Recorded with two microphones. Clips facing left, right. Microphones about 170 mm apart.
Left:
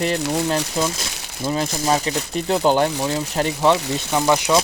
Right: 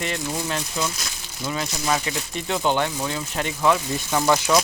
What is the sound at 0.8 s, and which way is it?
Speech, 35° left (ahead or behind).